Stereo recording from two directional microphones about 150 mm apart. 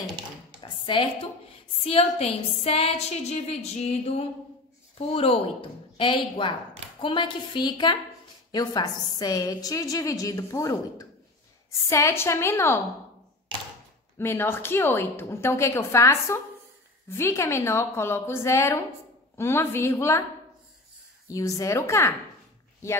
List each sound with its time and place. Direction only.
0.6 s a sound: 35° left (ahead or behind)
1.9 s a woman's voice: 40° left (ahead or behind); by 12.8 s 15° left (ahead or behind)
14.1 s a woman's voice: 15° left (ahead or behind)
21.3 s a woman's voice: 20° left (ahead or behind)